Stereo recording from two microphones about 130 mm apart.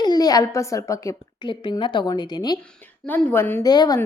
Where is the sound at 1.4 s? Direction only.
40° left (ahead or behind).